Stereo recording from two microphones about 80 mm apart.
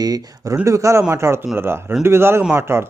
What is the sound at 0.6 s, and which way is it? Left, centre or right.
Speech, right.